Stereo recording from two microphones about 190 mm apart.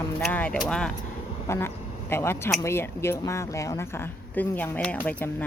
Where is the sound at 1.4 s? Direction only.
15° left (ahead or behind).